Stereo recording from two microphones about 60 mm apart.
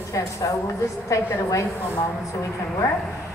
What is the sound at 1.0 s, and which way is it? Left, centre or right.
Speech, left.